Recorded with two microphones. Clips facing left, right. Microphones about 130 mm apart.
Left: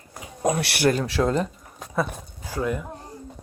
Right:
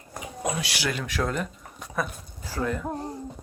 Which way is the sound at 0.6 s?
65° left (ahead or behind).